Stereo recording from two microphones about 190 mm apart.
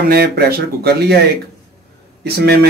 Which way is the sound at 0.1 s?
55° right (ahead or behind).